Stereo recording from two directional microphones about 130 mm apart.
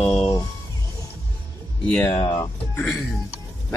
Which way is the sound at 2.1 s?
35° left (ahead or behind).